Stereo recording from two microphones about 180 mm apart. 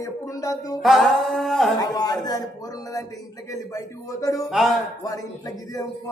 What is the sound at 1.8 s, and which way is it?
Speech, 20° left (ahead or behind).